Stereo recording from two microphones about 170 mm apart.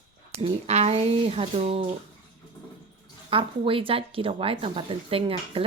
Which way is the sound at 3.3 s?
30° right (ahead or behind).